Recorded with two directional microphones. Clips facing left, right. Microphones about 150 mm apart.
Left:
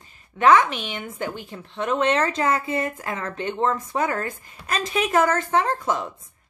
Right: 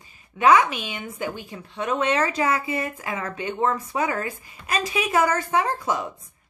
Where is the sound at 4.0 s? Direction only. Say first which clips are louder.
Left 1 dB; 45° left (ahead or behind).